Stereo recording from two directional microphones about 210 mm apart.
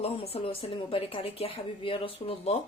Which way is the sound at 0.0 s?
30° left (ahead or behind).